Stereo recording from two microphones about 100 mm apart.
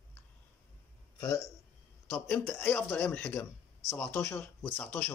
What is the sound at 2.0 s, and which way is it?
Speech, 15° left (ahead or behind).